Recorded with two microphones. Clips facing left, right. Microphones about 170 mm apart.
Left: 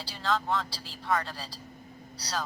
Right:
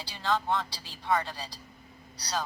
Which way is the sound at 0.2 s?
20° right (ahead or behind).